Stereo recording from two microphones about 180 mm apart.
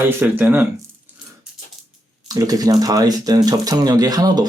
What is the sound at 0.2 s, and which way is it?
Speech, 10° right (ahead or behind).